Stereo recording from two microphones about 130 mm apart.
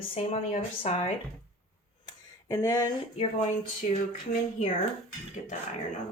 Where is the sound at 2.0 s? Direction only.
25° left (ahead or behind).